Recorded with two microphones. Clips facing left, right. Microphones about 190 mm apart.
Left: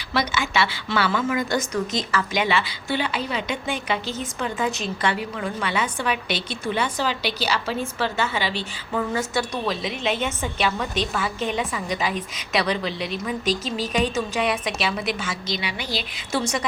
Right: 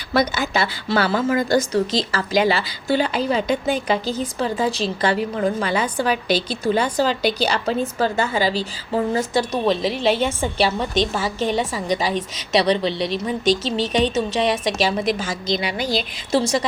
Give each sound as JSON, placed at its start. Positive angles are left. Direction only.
{"t": 0.1, "sound": "a woman's voice", "side_deg": -40}